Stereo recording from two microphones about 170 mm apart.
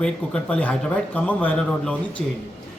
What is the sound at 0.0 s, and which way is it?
Speech, 5° left (ahead or behind).